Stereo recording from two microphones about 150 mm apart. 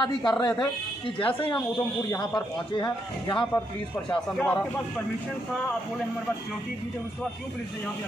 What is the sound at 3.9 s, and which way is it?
Speech, 10° left (ahead or behind).